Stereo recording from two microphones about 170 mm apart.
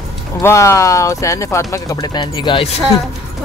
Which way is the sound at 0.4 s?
15° left (ahead or behind).